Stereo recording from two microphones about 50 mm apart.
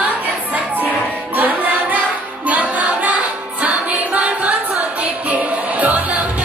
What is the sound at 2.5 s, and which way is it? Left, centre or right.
Music, right.